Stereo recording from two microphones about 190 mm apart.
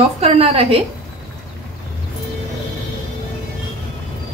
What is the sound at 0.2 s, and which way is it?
Speech, 30° right (ahead or behind).